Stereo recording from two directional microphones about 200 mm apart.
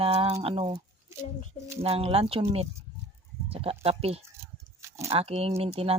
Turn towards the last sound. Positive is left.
turn(degrees=-30)  # may be behind; listen again after turning